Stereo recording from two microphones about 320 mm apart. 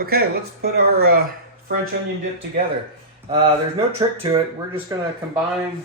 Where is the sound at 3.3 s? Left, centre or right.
Centre.